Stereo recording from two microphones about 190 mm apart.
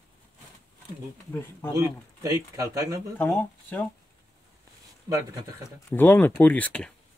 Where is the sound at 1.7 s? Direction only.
15° right (ahead or behind).